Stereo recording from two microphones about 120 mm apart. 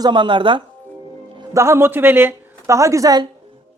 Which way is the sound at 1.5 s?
25° right (ahead or behind).